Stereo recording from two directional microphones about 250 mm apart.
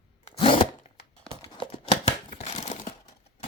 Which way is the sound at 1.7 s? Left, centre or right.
Left.